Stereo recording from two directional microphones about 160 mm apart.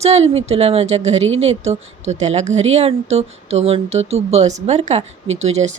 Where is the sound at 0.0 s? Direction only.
40° right (ahead or behind).